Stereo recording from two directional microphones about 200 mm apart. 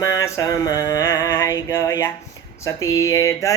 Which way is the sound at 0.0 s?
15° left (ahead or behind).